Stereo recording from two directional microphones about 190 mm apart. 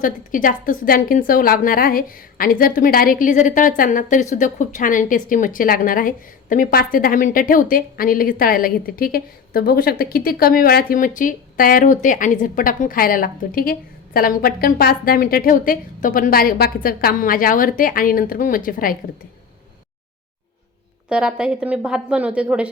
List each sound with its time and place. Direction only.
0.0 s a woman's voice: 45° left (ahead or behind)
21.1 s a woman's voice: 5° right (ahead or behind)